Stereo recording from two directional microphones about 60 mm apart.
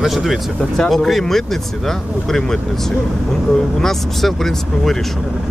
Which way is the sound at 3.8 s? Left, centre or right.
Centre.